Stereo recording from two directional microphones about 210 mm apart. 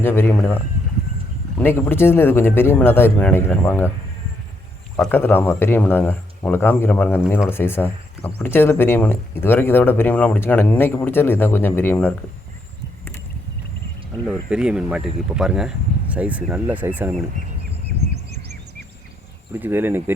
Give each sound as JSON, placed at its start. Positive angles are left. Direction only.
{"t": 0.0, "sound": "speech", "side_deg": 10}
{"t": 1.5, "sound": "speech", "side_deg": 10}
{"t": 4.9, "sound": "speech", "side_deg": 5}
{"t": 14.3, "sound": "speech", "side_deg": -5}
{"t": 19.5, "sound": "speech", "side_deg": -10}